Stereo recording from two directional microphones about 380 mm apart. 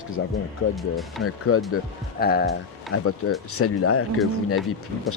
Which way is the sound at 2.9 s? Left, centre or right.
Left.